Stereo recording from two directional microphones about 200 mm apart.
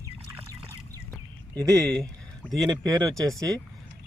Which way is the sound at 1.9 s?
5° left (ahead or behind).